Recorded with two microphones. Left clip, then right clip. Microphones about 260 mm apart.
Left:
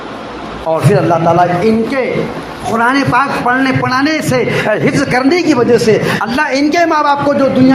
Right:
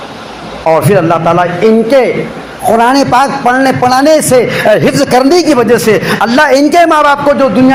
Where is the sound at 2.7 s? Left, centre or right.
Right.